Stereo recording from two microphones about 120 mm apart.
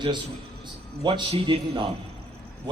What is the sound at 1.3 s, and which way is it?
Speech, 55° right (ahead or behind).